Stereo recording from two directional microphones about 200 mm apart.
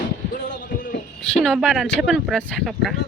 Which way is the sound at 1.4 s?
Centre (ahead or behind).